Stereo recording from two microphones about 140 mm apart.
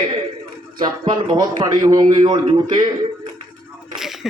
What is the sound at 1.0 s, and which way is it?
A man's voice, 30° right (ahead or behind).